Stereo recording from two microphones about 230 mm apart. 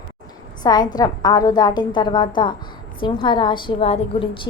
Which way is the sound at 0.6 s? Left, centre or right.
Centre.